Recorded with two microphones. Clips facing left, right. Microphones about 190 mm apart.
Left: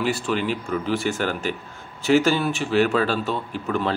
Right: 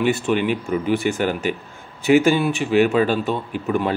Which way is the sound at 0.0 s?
20° right (ahead or behind).